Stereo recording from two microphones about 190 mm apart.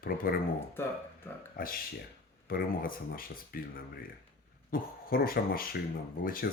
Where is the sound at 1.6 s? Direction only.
45° left (ahead or behind).